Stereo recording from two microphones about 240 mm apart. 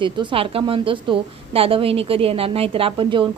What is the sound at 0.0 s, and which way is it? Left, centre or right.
A woman's voice, right.